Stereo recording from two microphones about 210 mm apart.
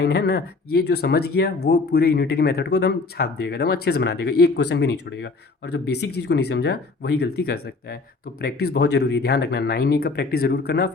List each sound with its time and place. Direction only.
0.0 s speech: 50° left (ahead or behind)